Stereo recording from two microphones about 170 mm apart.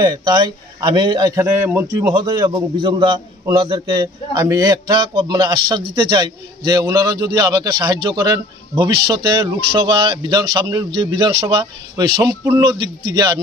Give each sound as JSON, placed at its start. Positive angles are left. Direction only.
{"t": 0.0, "sound": "a man's voice", "side_deg": -25}